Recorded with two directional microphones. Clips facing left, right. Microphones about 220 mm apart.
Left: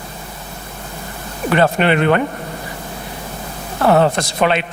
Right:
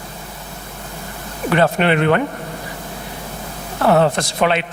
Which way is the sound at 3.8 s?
25° left (ahead or behind).